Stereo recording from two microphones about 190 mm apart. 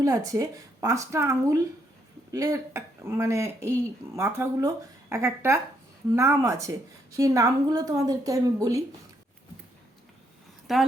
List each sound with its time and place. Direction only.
0.0 s speech: 15° right (ahead or behind)
10.7 s a woman's voice: centre (ahead or behind)